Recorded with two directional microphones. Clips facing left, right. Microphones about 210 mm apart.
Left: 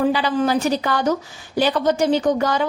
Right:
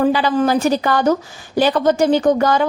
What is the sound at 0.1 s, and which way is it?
A woman's voice, 45° right (ahead or behind).